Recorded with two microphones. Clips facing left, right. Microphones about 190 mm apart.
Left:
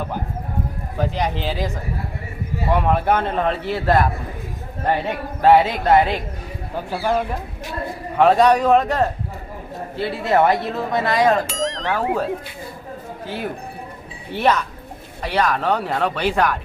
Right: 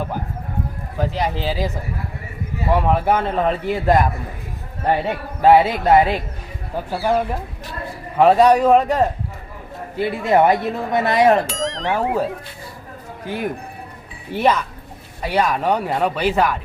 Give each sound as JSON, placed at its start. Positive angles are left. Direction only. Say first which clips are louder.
{"t": 0.9, "sound": "speech", "louder": "right 1 dB", "side_deg": -5}
{"t": 2.7, "sound": "speech", "louder": "right 1 dB", "side_deg": -5}
{"t": 5.4, "sound": "speech", "louder": "right 1 dB", "side_deg": -10}
{"t": 8.2, "sound": "speech", "louder": "right 2 dB", "side_deg": -10}
{"t": 11.4, "sound": "speech", "louder": "even", "side_deg": 0}
{"t": 13.2, "sound": "speech", "louder": "right 3 dB", "side_deg": -15}